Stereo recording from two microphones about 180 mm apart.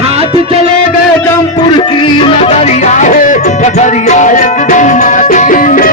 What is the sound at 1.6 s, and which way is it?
Music, 25° left (ahead or behind).